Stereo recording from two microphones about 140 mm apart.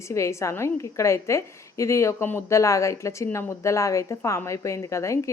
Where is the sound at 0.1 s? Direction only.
20° left (ahead or behind).